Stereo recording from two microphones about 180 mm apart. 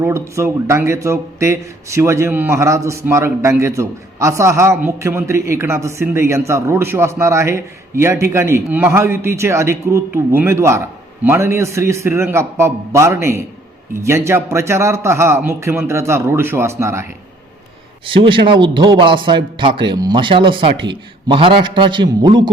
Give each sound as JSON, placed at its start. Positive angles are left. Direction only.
{"t": 0.0, "sound": "a man's voice", "side_deg": -15}
{"t": 18.0, "sound": "a man's voice", "side_deg": -30}